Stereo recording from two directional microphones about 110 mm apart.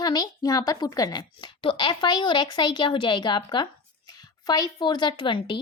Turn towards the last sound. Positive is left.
turn(degrees=50)  # may be behind; listen again after turning